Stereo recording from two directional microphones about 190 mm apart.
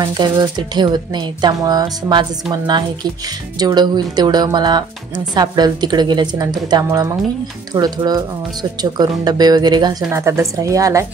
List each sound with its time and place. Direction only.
0.0 s a woman's voice: 20° right (ahead or behind)